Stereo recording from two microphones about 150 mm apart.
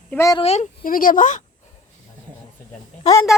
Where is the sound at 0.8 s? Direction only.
65° left (ahead or behind).